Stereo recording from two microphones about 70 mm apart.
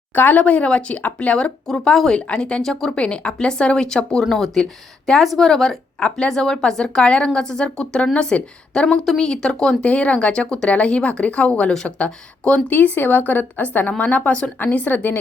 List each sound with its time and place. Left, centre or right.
0.1 s speech: left
1.6 s a woman's voice: centre; by 15.2 s left